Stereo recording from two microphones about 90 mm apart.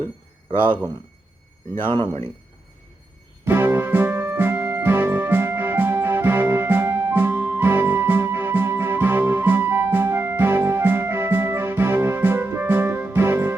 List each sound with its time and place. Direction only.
1.7 s speech: 25° left (ahead or behind)
3.4 s music: 20° right (ahead or behind)